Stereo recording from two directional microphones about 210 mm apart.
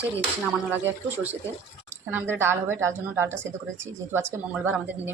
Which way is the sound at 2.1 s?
10° right (ahead or behind).